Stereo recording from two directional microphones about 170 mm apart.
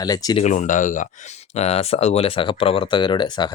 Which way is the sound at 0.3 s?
45° left (ahead or behind).